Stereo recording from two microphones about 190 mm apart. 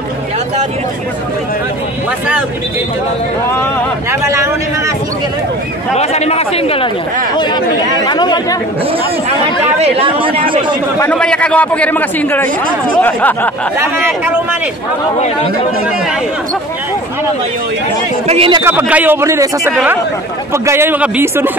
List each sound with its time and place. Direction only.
4.1 s a sound: 15° right (ahead or behind)
5.9 s speech: 35° left (ahead or behind)
9.8 s speech: 30° right (ahead or behind)
11.0 s a man's voice: 5° left (ahead or behind)
13.7 s speech: 10° right (ahead or behind)
15.1 s speech: 35° left (ahead or behind)
18.2 s speech: 30° right (ahead or behind)
18.6 s speech: 10° right (ahead or behind)
19.7 s speech: 5° right (ahead or behind)